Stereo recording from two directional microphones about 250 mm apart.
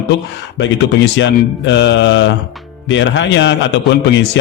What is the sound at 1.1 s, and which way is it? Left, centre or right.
A man's voice, left.